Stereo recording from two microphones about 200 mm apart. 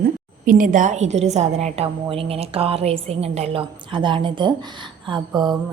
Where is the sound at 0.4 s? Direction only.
45° right (ahead or behind).